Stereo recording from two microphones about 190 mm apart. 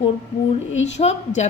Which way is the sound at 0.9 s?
35° left (ahead or behind).